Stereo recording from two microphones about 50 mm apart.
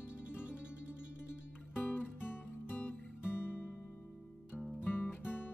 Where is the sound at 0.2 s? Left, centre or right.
Right.